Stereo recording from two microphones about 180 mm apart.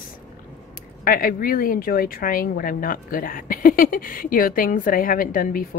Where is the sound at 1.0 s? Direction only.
50° left (ahead or behind).